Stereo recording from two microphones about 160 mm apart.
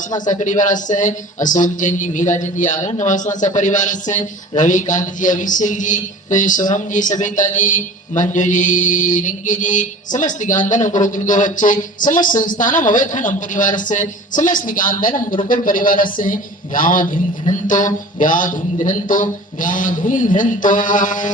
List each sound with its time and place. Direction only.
0.3 s a man's voice: 50° left (ahead or behind)